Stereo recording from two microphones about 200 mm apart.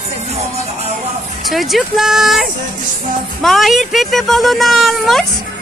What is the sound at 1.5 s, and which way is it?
Speech, centre (ahead or behind).